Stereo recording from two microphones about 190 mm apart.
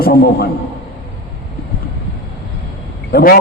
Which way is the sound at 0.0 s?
55° left (ahead or behind).